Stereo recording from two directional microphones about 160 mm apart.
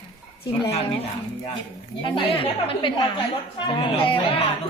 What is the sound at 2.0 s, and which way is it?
A woman's voice, 35° left (ahead or behind).